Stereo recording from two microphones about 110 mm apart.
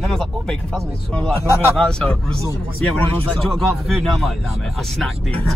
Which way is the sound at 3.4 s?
Centre (ahead or behind).